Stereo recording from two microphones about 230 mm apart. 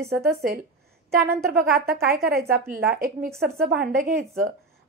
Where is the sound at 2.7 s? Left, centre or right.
Right.